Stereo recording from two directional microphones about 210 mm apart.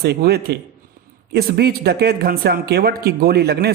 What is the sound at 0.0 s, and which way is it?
Speech, 50° right (ahead or behind).